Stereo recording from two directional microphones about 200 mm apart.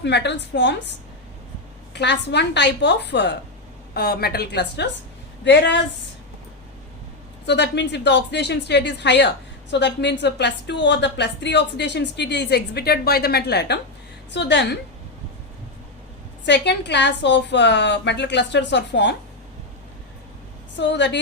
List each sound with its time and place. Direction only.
0.0 s a woman's voice: 60° left (ahead or behind)
1.9 s a woman's voice: 60° left (ahead or behind)
7.4 s a woman's voice: 60° left (ahead or behind)
16.5 s a woman's voice: 60° left (ahead or behind)
20.7 s a woman's voice: 65° left (ahead or behind)